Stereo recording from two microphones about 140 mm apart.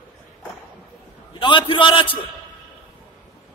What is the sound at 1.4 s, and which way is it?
Speech, 35° left (ahead or behind).